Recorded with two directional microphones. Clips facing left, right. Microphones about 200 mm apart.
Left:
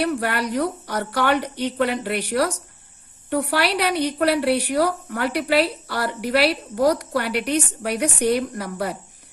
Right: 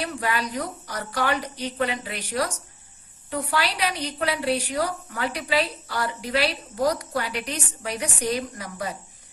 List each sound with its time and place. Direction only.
0.0 s a woman's voice: 65° left (ahead or behind)